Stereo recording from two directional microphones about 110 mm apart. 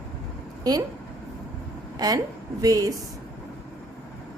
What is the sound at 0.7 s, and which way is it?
Speech, 35° right (ahead or behind).